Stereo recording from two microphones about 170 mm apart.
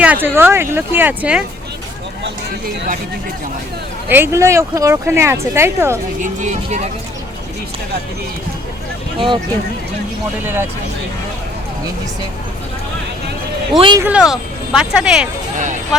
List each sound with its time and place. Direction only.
0.0 s speech: 10° right (ahead or behind)
4.1 s speech: 15° right (ahead or behind)
6.2 s speech: 45° right (ahead or behind)
9.1 s speech: 30° right (ahead or behind)
10.4 s speech: 15° right (ahead or behind)
13.7 s speech: 30° right (ahead or behind)
14.0 s speech: 5° right (ahead or behind)